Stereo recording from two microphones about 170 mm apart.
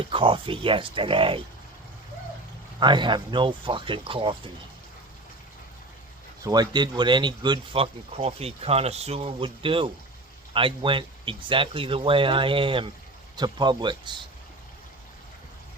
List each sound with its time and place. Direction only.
0.0 s speech: 30° right (ahead or behind)
2.8 s speech: 25° right (ahead or behind)
6.4 s speech: 25° right (ahead or behind)